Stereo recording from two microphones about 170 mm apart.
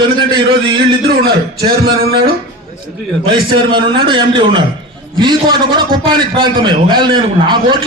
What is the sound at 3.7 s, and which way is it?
A man's voice, 30° right (ahead or behind).